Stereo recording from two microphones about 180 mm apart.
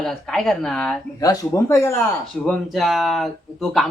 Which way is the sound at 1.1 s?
20° left (ahead or behind).